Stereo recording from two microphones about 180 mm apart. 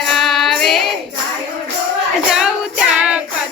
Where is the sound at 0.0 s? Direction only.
Centre (ahead or behind).